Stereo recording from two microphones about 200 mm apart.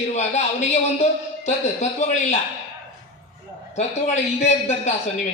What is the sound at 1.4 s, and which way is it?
Speech, 35° left (ahead or behind).